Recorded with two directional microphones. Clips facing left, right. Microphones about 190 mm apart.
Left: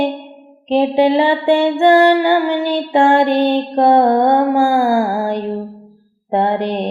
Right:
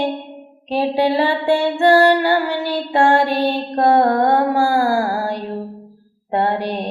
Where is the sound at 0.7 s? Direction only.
20° left (ahead or behind).